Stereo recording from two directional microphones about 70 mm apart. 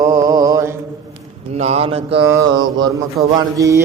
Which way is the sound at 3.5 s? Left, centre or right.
Right.